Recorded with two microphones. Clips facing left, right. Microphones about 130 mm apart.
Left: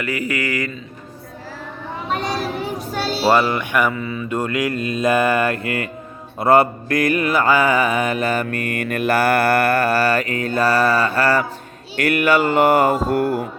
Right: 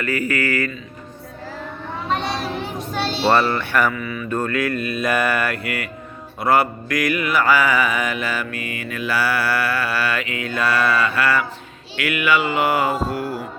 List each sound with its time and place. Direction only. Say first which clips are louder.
0.0 s speech: right 1 dB; 15° left (ahead or behind)
2.0 s a child's voice: left 1 dB; 5° left (ahead or behind)
3.9 s mantra: left 2 dB; 30° left (ahead or behind)
4.3 s mantra: even; 15° left (ahead or behind)
5.6 s mantra: left 3 dB; 40° left (ahead or behind)
6.4 s mantra: left 4 dB; 25° left (ahead or behind)
7.4 s mantra: left 1 dB; 25° left (ahead or behind); by 13.4 s 55° left (ahead or behind)